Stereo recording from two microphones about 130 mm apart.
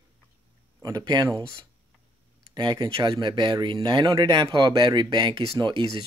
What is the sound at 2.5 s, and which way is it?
Speech, 35° right (ahead or behind).